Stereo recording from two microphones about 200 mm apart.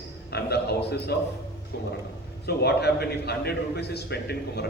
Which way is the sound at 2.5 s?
55° left (ahead or behind).